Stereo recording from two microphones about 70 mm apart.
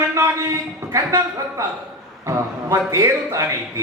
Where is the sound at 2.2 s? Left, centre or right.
Right.